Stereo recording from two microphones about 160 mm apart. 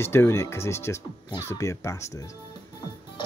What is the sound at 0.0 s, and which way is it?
Speech, 15° left (ahead or behind).